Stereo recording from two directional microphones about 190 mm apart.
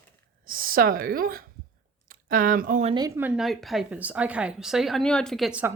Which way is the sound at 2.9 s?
15° right (ahead or behind).